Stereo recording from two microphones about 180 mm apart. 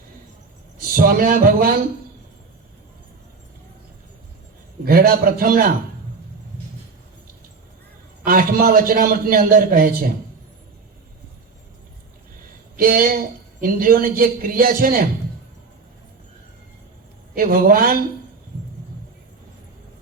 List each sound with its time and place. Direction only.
0.8 s a man's voice: 50° right (ahead or behind)
4.9 s a man's voice: 55° right (ahead or behind)
8.2 s a man's voice: 50° right (ahead or behind)
12.7 s a man's voice: 50° right (ahead or behind)
17.3 s a man's voice: 50° right (ahead or behind)